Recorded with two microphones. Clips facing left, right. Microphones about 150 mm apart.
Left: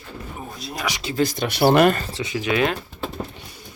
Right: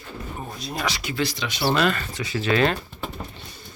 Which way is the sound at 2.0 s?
30° left (ahead or behind).